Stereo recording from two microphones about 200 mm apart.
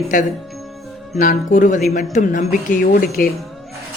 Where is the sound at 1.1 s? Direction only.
40° left (ahead or behind).